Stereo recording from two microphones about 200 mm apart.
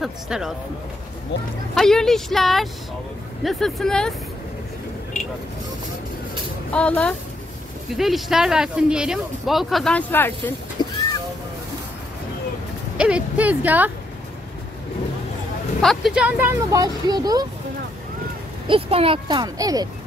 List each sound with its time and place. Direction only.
0.0 s speech: centre (ahead or behind)
1.8 s speech: centre (ahead or behind)
6.7 s speech: 5° left (ahead or behind)
10.8 s a sound: 20° left (ahead or behind)
12.9 s speech: 5° right (ahead or behind)
15.8 s speech: centre (ahead or behind); by 17.5 s 20° right (ahead or behind)
18.7 s a child's voice: 30° right (ahead or behind)